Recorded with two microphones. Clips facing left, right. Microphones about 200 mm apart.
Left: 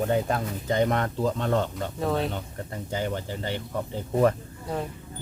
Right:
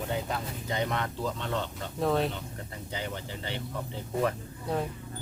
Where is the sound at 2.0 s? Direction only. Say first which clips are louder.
Even; centre (ahead or behind).